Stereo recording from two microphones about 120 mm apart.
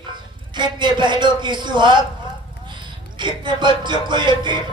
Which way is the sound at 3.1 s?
40° right (ahead or behind).